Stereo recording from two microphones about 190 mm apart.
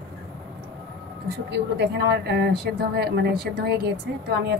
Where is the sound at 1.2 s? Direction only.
60° right (ahead or behind).